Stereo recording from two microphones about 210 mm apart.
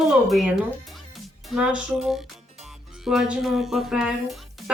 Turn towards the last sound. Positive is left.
turn(degrees=0)  # may be behind; listen again after turning